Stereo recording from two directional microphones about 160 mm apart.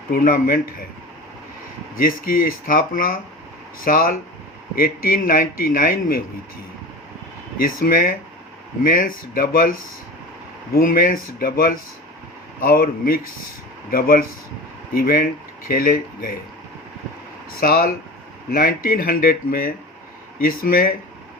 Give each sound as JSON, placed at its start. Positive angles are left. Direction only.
{"t": 0.1, "sound": "speech", "side_deg": 60}
{"t": 2.0, "sound": "speech", "side_deg": 60}
{"t": 7.6, "sound": "speech", "side_deg": 65}
{"t": 10.8, "sound": "speech", "side_deg": 60}
{"t": 17.6, "sound": "speech", "side_deg": 65}